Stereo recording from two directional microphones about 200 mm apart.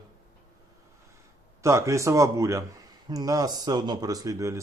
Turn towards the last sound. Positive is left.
turn(degrees=-15)  # may be behind; listen again after turning